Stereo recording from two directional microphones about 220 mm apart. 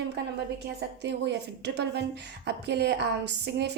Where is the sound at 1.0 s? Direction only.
50° right (ahead or behind).